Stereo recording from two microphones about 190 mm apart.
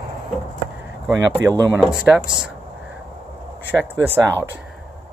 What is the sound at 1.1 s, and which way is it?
Speech, 15° right (ahead or behind).